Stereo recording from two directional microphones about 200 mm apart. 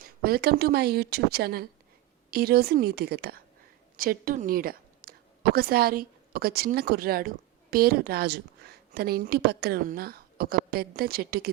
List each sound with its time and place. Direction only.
0.0 s a woman's voice: 50° right (ahead or behind)